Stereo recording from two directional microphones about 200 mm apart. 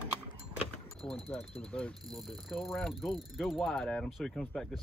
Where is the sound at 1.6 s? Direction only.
5° left (ahead or behind).